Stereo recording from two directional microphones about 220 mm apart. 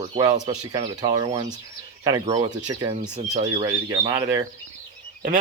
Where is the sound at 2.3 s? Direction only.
20° right (ahead or behind).